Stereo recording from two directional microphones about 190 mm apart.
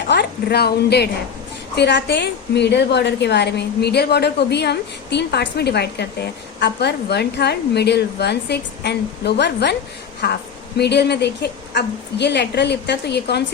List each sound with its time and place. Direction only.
0.1 s a woman's voice: 60° left (ahead or behind)